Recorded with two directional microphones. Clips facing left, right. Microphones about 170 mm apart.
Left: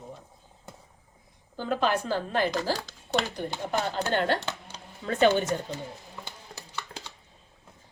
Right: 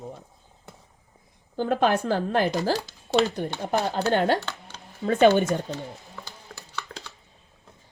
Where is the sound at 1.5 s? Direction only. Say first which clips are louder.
Right 4 dB; 55° right (ahead or behind).